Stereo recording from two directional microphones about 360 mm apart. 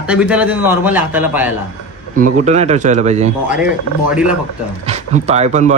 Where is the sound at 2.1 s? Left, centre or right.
Right.